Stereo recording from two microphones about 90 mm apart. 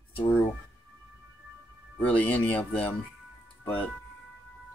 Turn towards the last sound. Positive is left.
turn(degrees=20)  # may be behind; listen again after turning